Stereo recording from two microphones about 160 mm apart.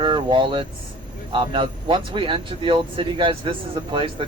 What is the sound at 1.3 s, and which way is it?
Speech, 30° right (ahead or behind).